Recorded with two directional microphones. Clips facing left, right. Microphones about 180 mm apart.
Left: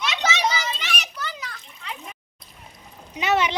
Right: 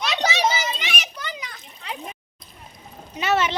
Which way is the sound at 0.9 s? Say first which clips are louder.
Even; 10° right (ahead or behind).